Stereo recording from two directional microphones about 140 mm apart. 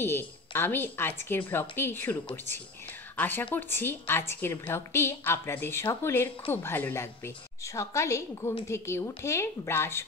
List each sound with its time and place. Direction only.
0.0 s a woman's voice: 15° left (ahead or behind)
3.2 s a woman's voice: 15° left (ahead or behind)